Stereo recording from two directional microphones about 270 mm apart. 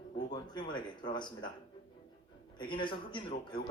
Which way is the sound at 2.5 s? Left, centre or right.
Centre.